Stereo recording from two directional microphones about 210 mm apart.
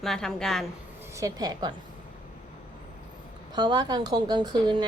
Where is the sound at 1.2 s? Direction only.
15° right (ahead or behind).